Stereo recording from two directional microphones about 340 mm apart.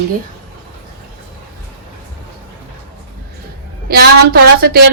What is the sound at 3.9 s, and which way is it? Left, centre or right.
Speech, right.